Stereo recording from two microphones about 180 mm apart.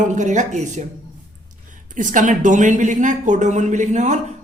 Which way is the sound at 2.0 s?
45° right (ahead or behind).